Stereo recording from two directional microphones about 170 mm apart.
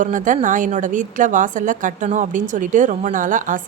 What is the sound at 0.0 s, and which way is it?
A woman's voice, 50° right (ahead or behind).